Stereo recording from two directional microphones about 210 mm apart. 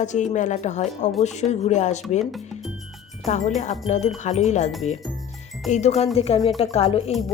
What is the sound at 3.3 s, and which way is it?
A woman's voice, 35° left (ahead or behind).